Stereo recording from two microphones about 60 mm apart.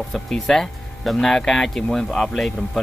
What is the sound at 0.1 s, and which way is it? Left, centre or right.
Speech, centre.